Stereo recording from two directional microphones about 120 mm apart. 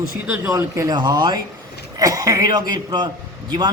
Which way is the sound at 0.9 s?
40° right (ahead or behind).